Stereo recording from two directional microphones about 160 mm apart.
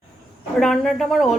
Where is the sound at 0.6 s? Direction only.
Centre (ahead or behind).